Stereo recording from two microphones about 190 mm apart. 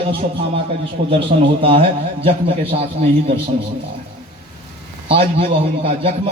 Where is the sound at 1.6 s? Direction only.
30° right (ahead or behind).